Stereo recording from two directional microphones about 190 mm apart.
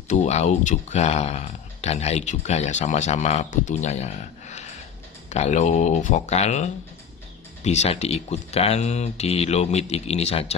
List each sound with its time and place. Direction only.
0.1 s speech: 40° left (ahead or behind)